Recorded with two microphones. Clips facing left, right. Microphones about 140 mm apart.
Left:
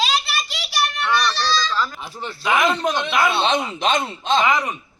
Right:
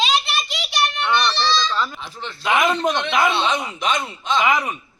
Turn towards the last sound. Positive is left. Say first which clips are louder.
# even
turn(degrees=-10)  # may be behind; listen again after turning